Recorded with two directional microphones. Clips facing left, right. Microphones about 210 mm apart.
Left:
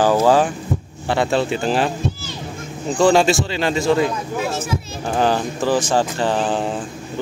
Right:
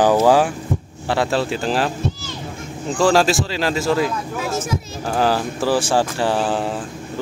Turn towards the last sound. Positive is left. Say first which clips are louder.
# even
turn(degrees=-5)  # may be behind; listen again after turning